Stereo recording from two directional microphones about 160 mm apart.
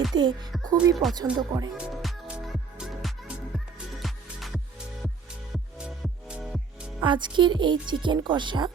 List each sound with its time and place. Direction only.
0.1 s speech: 30° right (ahead or behind)
1.7 s music: 5° right (ahead or behind)
5.7 s music: 5° right (ahead or behind)
7.0 s speech: 30° right (ahead or behind)